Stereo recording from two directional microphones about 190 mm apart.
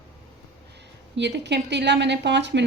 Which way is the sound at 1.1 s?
65° right (ahead or behind).